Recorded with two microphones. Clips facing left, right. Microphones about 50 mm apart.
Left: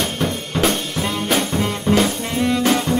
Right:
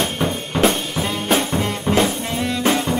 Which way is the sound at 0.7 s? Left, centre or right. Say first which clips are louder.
Even; centre.